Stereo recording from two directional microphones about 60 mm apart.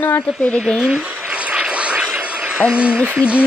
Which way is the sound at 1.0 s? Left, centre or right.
Right.